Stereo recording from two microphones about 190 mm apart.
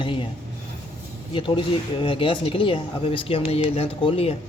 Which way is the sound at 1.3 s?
25° left (ahead or behind).